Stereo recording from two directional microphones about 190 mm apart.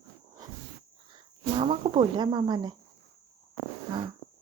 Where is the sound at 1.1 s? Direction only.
25° right (ahead or behind).